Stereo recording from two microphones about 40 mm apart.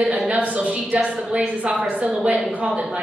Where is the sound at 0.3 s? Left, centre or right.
Right.